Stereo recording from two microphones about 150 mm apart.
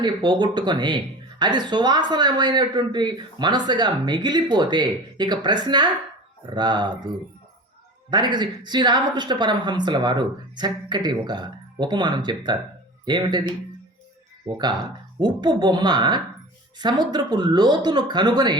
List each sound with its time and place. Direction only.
0.0 s speech: 30° right (ahead or behind)
8.1 s speech: 30° right (ahead or behind)
14.4 s speech: 30° right (ahead or behind)